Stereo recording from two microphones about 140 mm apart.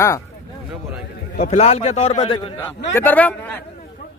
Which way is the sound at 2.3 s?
35° left (ahead or behind).